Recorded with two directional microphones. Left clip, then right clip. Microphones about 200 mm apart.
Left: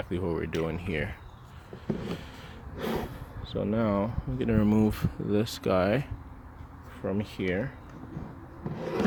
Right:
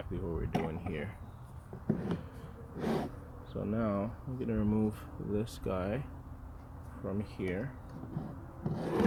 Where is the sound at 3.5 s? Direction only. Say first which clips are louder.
Left 7 dB; 40° left (ahead or behind).